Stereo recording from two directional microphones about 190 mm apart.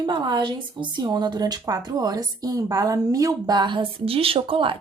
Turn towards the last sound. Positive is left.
turn(degrees=-25)  # may be behind; listen again after turning